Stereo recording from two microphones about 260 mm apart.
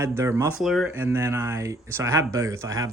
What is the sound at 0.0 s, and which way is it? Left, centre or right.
Speech, centre.